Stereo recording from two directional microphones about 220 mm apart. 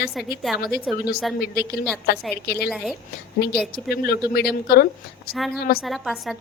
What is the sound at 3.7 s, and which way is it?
A woman's voice, 45° left (ahead or behind).